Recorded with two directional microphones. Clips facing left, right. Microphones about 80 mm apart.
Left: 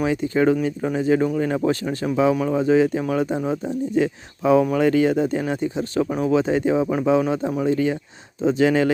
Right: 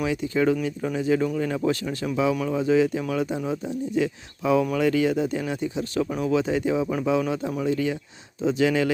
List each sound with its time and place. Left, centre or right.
0.0 s speech: left